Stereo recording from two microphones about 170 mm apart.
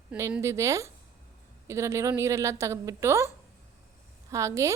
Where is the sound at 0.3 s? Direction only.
15° right (ahead or behind).